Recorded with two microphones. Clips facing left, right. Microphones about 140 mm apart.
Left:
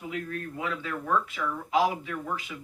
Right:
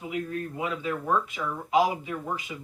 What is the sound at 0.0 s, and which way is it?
Speech, 15° right (ahead or behind).